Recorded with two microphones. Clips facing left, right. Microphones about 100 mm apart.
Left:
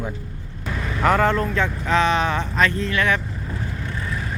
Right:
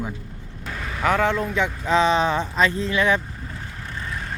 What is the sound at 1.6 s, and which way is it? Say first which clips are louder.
Speech: even; 20° right (ahead or behind).